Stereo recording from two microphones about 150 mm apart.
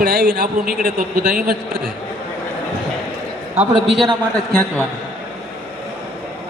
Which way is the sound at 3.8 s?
Centre (ahead or behind).